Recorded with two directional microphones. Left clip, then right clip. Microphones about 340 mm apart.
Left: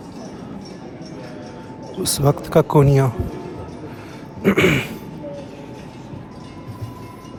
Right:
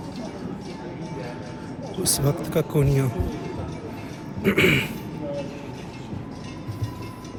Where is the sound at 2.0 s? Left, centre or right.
Centre.